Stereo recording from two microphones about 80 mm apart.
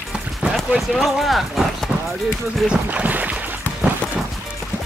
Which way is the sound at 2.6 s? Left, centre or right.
Centre.